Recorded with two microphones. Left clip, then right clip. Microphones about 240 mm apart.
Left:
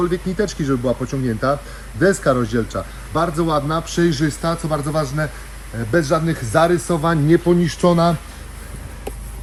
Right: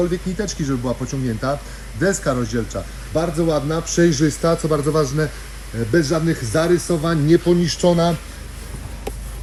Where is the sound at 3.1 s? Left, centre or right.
Centre.